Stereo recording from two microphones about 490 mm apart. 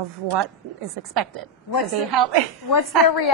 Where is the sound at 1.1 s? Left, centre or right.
Right.